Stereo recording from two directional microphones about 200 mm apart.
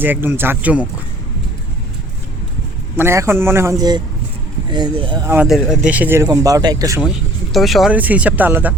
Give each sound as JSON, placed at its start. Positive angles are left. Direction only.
{"t": 0.0, "sound": "speech", "side_deg": -10}
{"t": 2.9, "sound": "speech", "side_deg": -10}
{"t": 5.5, "sound": "speech", "side_deg": 0}
{"t": 7.5, "sound": "speech", "side_deg": 0}